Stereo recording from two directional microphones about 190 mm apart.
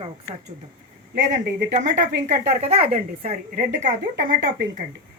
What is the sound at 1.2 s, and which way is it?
Speech, 40° right (ahead or behind).